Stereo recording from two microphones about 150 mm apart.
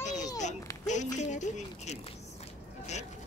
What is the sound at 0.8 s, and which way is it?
Speech, 55° left (ahead or behind).